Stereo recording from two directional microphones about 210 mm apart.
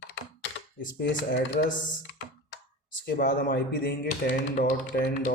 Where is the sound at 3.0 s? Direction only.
40° left (ahead or behind).